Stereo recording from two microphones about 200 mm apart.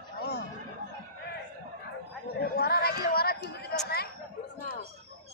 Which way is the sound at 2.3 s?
50° left (ahead or behind).